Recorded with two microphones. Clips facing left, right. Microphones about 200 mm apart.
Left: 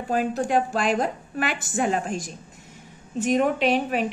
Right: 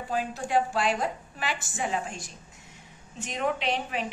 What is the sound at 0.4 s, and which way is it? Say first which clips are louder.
A woman's voice: left 4 dB; 50° left (ahead or behind).